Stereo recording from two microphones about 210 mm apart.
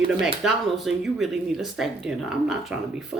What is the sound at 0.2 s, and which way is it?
Speech, centre (ahead or behind).